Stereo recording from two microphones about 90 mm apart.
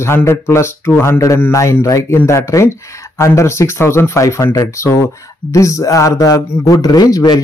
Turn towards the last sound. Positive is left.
turn(degrees=40)  # may be behind; listen again after turning